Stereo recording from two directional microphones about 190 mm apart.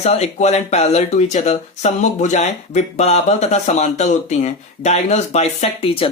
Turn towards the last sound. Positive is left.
turn(degrees=30)  # may be behind; listen again after turning